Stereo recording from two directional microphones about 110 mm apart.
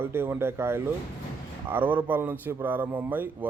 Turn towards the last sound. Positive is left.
turn(degrees=-15)  # may be behind; listen again after turning